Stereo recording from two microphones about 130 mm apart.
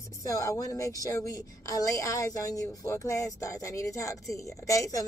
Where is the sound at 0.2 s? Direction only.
25° left (ahead or behind).